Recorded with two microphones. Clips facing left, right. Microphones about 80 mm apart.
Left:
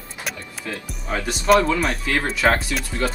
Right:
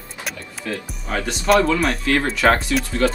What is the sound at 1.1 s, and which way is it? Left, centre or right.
Speech, centre.